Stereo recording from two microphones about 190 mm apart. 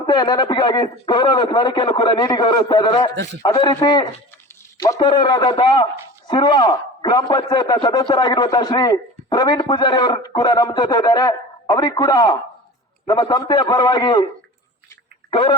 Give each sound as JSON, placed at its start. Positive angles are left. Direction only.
{"t": 0.1, "sound": "a man's voice", "side_deg": 20}
{"t": 15.3, "sound": "speech", "side_deg": 25}